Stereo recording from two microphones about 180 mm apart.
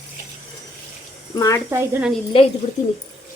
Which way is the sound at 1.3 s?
20° left (ahead or behind).